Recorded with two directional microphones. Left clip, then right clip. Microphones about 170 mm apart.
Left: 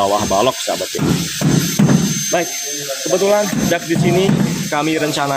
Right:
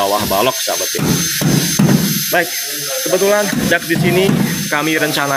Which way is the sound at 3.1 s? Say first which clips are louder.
Right 1 dB; 5° right (ahead or behind).